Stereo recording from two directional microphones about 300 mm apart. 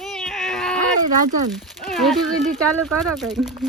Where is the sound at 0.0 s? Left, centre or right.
Centre.